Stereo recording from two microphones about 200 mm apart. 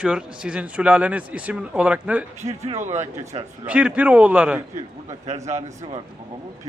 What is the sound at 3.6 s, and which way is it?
Speech, 5° right (ahead or behind).